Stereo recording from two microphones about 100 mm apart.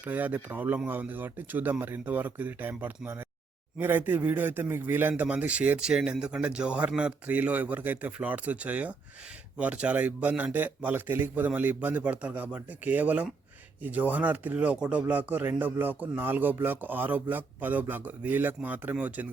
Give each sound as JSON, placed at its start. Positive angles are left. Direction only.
{"t": 0.0, "sound": "speech", "side_deg": -15}